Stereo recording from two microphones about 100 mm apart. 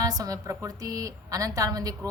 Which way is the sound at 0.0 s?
35° right (ahead or behind).